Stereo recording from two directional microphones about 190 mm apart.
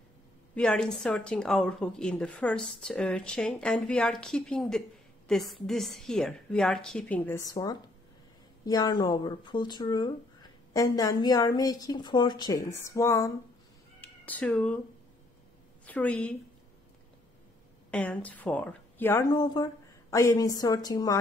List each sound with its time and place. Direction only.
0.6 s a woman's voice: 5° left (ahead or behind)
15.8 s speech: 10° left (ahead or behind)
17.9 s speech: 10° left (ahead or behind)